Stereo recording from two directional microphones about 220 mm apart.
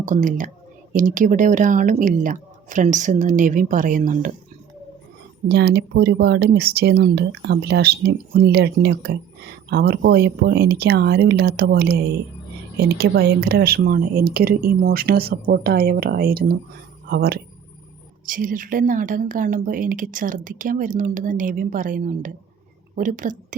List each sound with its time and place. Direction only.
0.0 s a woman's voice: 35° right (ahead or behind)
5.5 s a woman's voice: 50° right (ahead or behind)